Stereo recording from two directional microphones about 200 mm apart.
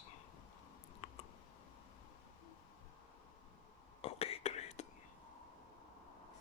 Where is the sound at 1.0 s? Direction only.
30° left (ahead or behind).